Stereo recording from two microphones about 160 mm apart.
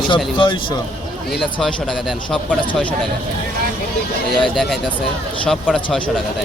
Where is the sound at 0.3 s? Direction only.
30° left (ahead or behind).